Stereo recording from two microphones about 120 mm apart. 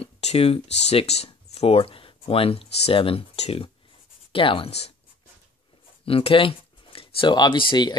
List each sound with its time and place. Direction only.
0.0 s speech: 60° left (ahead or behind)
6.0 s speech: 50° left (ahead or behind)